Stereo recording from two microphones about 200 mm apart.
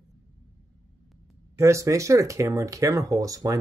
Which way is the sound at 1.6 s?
15° right (ahead or behind).